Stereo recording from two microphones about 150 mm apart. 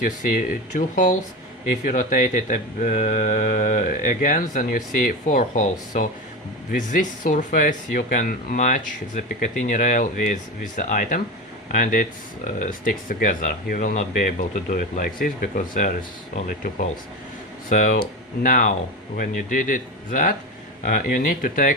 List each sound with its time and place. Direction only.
0.0 s speech: 65° left (ahead or behind)
6.7 s speech: 60° left (ahead or behind)
17.7 s speech: 65° left (ahead or behind)